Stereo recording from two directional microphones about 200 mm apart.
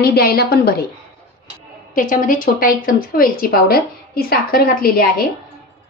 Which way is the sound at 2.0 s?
40° left (ahead or behind).